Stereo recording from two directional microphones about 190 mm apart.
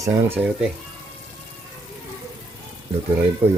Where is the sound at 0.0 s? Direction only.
15° right (ahead or behind).